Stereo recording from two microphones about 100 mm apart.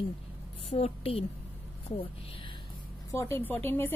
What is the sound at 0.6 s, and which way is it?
Speech, 85° left.